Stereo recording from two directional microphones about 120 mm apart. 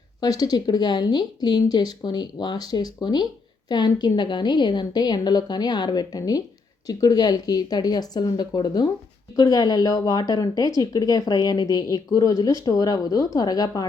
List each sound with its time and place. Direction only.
0.2 s a woman's voice: 35° left (ahead or behind)